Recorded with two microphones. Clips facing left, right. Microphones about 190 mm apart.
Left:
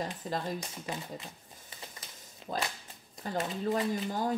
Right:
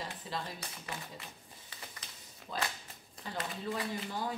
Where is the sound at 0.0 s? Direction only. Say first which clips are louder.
Left 6 dB; 45° left (ahead or behind).